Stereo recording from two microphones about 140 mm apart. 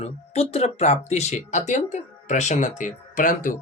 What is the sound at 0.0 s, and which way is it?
Speech, 50° left (ahead or behind).